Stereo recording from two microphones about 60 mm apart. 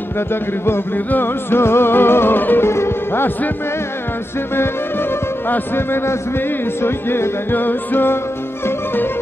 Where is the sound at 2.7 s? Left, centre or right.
Left.